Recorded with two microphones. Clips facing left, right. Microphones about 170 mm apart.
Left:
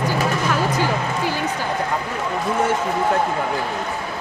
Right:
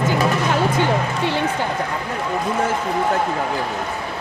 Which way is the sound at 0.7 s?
25° right (ahead or behind).